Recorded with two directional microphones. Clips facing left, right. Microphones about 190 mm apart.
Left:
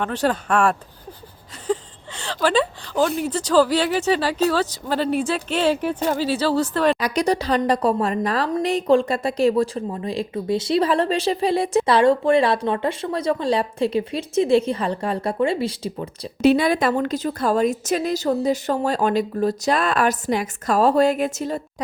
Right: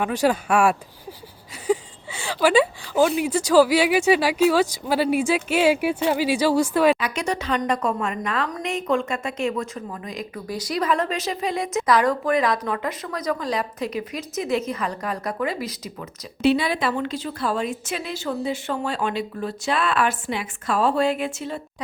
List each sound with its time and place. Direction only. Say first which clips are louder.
0.0 s speech: right 1 dB; 10° right (ahead or behind)
7.0 s a woman's voice: left 5 dB; 35° left (ahead or behind)
16.4 s a woman's voice: left 4 dB; 45° left (ahead or behind)